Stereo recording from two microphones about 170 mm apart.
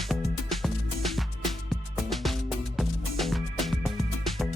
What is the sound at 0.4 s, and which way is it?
Music, centre (ahead or behind).